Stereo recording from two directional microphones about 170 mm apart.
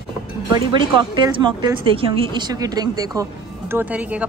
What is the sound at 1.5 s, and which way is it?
Speech, 30° right (ahead or behind).